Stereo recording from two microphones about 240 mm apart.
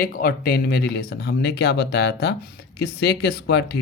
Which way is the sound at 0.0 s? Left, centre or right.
Left.